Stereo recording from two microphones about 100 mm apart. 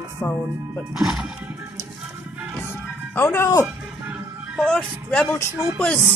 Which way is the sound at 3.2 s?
25° left (ahead or behind).